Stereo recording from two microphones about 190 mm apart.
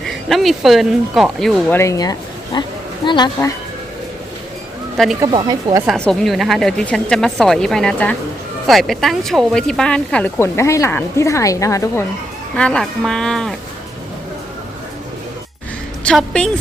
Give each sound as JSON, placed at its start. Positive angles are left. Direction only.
{"t": 0.0, "sound": "speech", "side_deg": 0}
{"t": 1.8, "sound": "speech", "side_deg": 20}
{"t": 5.2, "sound": "speech", "side_deg": -20}
{"t": 5.8, "sound": "speech", "side_deg": 0}
{"t": 12.5, "sound": "speech", "side_deg": 5}
{"t": 16.0, "sound": "speech", "side_deg": 5}